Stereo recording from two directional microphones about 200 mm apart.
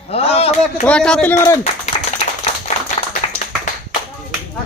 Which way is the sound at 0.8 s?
5° left (ahead or behind).